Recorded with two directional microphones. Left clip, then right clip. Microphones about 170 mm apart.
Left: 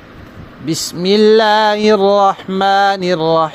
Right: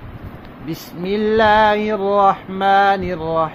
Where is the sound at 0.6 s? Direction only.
55° left (ahead or behind).